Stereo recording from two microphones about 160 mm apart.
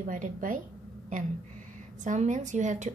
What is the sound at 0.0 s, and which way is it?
Speech, 55° right (ahead or behind).